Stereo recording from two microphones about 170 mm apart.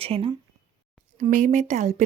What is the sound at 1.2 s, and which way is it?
Speech, 45° right (ahead or behind).